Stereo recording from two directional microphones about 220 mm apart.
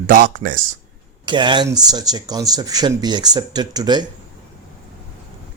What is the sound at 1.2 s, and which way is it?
Speech, 20° right (ahead or behind).